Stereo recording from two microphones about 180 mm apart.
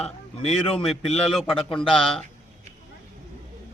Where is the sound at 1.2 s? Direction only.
Centre (ahead or behind).